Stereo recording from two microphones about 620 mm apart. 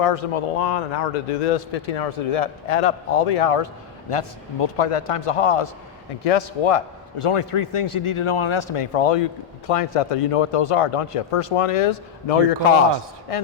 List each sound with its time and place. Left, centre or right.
0.0 s a man's voice: left